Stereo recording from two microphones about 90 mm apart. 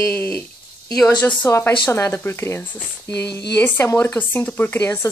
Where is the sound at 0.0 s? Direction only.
15° left (ahead or behind); by 3.4 s 35° left (ahead or behind).